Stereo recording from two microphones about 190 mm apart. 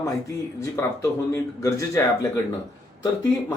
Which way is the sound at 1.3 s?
15° left (ahead or behind).